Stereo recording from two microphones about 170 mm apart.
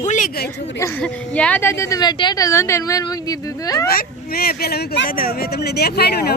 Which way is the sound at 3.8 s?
65° left (ahead or behind).